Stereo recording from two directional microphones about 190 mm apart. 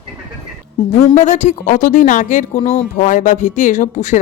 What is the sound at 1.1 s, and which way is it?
A woman's voice, 40° left (ahead or behind).